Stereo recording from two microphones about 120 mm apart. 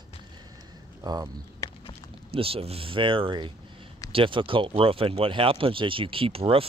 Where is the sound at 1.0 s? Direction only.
30° right (ahead or behind).